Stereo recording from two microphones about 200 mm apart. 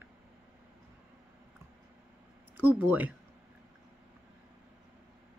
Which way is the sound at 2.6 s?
10° right (ahead or behind).